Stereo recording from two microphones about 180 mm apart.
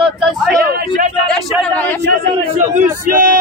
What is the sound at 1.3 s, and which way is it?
Speech, 10° left (ahead or behind).